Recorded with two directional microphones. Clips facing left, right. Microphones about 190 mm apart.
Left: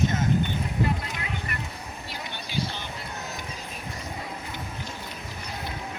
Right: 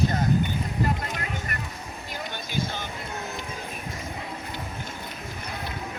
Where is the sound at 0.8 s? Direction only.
45° right (ahead or behind).